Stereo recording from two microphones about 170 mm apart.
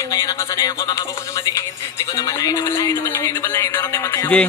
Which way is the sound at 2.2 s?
20° left (ahead or behind).